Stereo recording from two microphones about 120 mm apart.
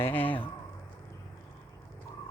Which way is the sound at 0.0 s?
15° left (ahead or behind).